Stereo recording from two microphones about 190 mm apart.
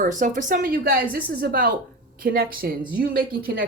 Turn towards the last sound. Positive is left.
turn(degrees=-50)  # may be behind; listen again after turning